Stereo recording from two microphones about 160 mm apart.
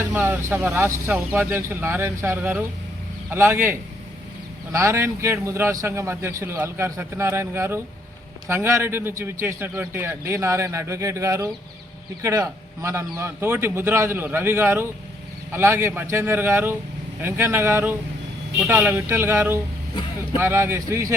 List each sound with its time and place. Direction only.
0.0 s a man's voice: 10° right (ahead or behind)